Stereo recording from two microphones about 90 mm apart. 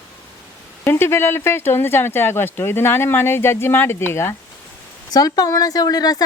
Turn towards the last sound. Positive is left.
turn(degrees=45)  # may be behind; listen again after turning